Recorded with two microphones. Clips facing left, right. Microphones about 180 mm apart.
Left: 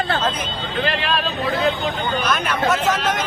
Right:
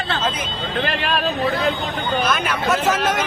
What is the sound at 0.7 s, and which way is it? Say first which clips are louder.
Speech: even; 45° right (ahead or behind).